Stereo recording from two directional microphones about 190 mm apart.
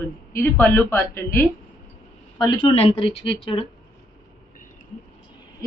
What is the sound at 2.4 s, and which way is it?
Speech, 25° left (ahead or behind).